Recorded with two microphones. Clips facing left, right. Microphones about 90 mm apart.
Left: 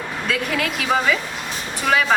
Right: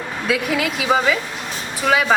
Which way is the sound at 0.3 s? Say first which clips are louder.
Right 3 dB; 5° right (ahead or behind).